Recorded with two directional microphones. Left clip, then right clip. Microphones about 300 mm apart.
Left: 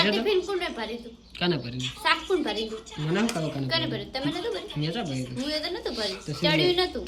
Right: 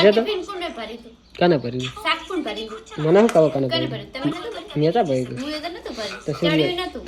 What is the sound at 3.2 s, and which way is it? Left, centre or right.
Speech, centre.